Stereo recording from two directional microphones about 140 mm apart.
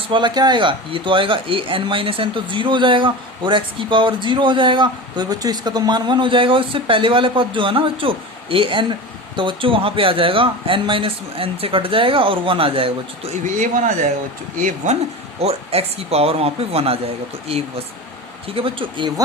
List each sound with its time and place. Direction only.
0.1 s speech: 35° right (ahead or behind)
13.6 s speech: 70° right (ahead or behind)
15.4 s speech: 45° right (ahead or behind)
18.4 s speech: 40° right (ahead or behind)